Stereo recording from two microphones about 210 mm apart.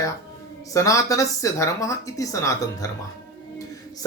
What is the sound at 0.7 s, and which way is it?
Speech, 15° left (ahead or behind).